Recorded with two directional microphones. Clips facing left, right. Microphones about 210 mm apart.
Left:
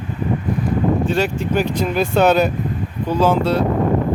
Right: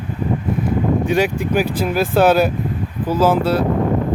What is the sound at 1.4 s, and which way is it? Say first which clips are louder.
Speech: right 1 dB; 10° right (ahead or behind).